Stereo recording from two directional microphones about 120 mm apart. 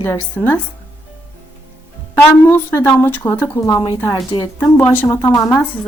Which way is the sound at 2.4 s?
20° left (ahead or behind).